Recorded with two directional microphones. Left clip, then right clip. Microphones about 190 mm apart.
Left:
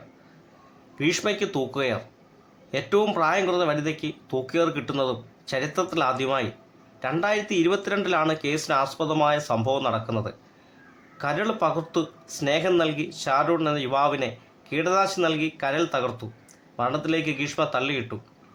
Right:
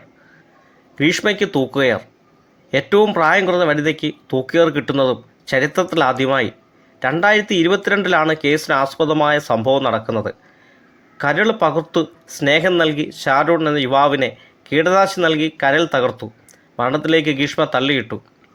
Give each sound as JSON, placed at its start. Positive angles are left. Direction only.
{"t": 0.9, "sound": "speech", "side_deg": -25}